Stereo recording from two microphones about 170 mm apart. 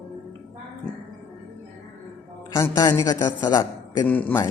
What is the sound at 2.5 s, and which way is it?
A man's voice, 20° left (ahead or behind).